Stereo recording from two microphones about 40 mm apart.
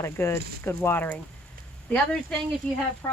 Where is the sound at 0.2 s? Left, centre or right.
Left.